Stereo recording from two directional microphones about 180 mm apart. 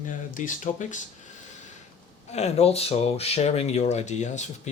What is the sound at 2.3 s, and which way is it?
Speech, 35° left (ahead or behind).